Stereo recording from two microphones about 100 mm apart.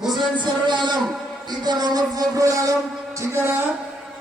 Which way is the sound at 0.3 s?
50° right (ahead or behind).